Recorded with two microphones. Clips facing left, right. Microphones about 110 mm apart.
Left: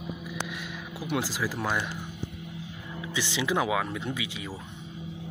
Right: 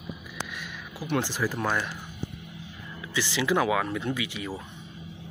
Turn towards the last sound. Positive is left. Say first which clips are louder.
# right 3 dB
turn(degrees=15)  # may be behind; listen again after turning